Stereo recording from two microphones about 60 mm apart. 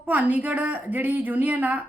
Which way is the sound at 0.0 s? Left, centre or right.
Right.